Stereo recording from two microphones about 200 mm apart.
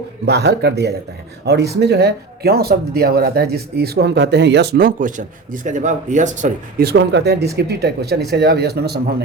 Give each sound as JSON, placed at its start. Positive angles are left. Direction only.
{"t": 0.3, "sound": "speech", "side_deg": -55}